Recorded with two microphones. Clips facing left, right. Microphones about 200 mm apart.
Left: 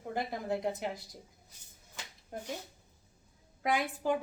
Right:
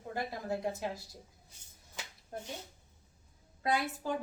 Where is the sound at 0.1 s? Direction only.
20° left (ahead or behind).